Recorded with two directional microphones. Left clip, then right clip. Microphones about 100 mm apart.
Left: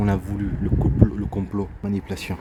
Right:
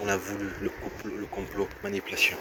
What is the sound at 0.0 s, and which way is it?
Speech, 40° left (ahead or behind).